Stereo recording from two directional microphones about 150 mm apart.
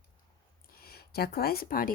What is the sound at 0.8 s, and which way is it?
Speech, 90° left.